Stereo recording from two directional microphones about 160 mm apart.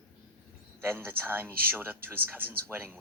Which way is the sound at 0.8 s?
15° right (ahead or behind).